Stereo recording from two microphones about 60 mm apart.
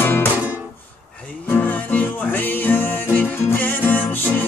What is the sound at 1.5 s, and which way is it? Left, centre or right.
Music, left.